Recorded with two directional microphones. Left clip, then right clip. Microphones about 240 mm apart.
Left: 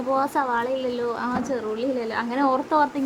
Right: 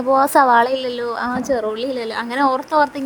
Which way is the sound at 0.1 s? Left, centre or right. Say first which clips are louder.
Right 10 dB; right.